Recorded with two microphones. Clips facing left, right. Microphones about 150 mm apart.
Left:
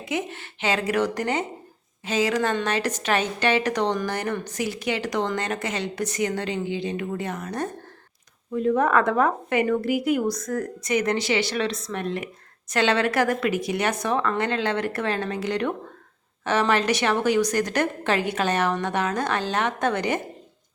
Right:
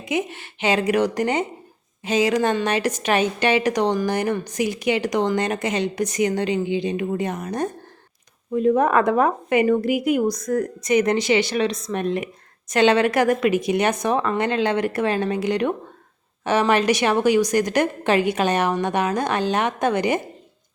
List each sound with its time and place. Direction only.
0.0 s a woman's voice: 15° right (ahead or behind)